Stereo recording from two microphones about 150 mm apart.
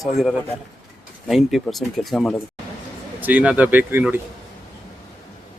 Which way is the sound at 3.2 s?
10° right (ahead or behind).